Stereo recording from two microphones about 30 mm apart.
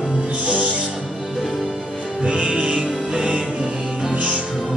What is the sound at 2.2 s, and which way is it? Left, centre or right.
Music, right.